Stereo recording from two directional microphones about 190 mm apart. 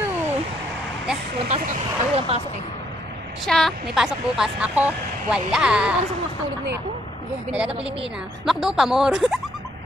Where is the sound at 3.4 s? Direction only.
Centre (ahead or behind).